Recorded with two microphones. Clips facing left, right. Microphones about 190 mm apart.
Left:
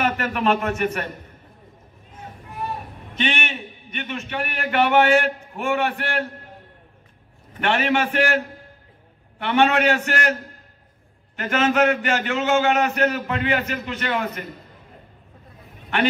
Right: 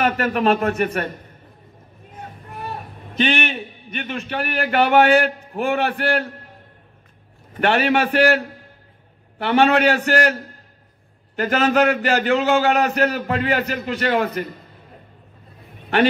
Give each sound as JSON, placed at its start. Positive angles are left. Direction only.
{"t": 0.0, "sound": "a man's voice", "side_deg": -35}
{"t": 3.2, "sound": "a man's voice", "side_deg": -35}
{"t": 7.6, "sound": "a man's voice", "side_deg": -40}
{"t": 9.4, "sound": "a man's voice", "side_deg": -35}
{"t": 11.3, "sound": "a man's voice", "side_deg": -35}